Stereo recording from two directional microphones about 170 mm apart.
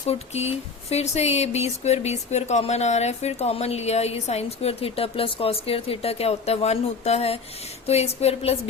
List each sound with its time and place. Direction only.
0.1 s speech: 40° left (ahead or behind)